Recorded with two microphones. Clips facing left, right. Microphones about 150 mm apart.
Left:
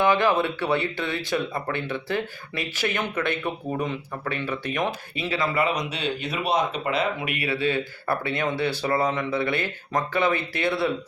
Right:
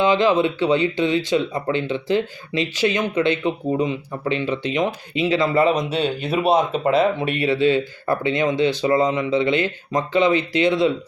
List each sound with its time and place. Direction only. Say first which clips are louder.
0.0 s speech: right 4 dB; 20° right (ahead or behind)